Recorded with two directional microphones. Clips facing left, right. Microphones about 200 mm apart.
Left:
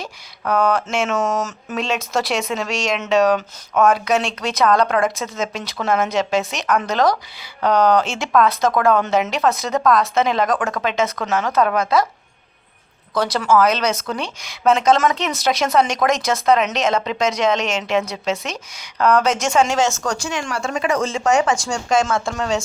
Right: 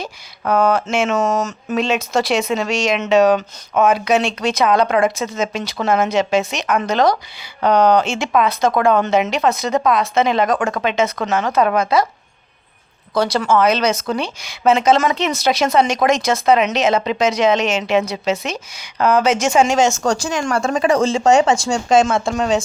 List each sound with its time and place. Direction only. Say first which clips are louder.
0.0 s speech: right 3 dB; centre (ahead or behind)
13.1 s speech: right 1 dB; centre (ahead or behind); by 20.0 s 15° right (ahead or behind)
20.0 s speech: right 5 dB; 35° right (ahead or behind); by 22.6 s 20° right (ahead or behind)